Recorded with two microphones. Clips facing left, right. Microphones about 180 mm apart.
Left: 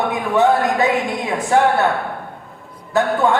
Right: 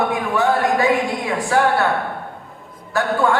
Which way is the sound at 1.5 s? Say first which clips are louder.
Left 3 dB; 20° left (ahead or behind).